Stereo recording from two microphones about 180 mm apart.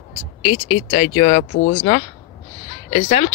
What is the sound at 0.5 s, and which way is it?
Speech, 40° left (ahead or behind).